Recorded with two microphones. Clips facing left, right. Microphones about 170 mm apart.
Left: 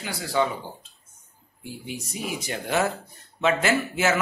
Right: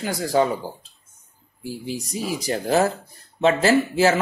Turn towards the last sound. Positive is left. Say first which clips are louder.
# right 6 dB
turn(degrees=-35)  # may be behind; listen again after turning